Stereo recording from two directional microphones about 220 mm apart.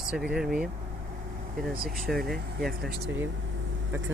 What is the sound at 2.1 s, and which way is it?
Speech, centre (ahead or behind).